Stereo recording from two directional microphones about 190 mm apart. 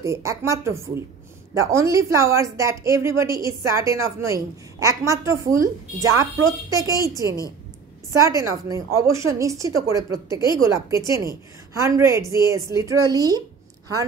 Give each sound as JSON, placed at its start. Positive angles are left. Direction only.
{"t": 0.0, "sound": "a woman's voice", "side_deg": -15}